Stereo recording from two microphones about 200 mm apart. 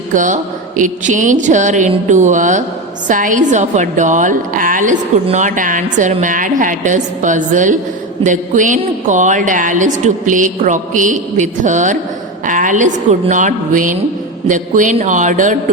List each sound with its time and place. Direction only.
0.1 s a woman's voice: 40° right (ahead or behind)